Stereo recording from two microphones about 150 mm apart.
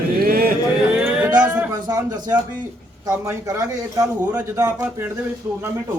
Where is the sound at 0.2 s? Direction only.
85° right.